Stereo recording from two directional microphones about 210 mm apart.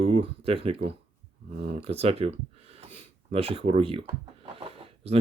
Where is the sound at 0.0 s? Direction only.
30° right (ahead or behind).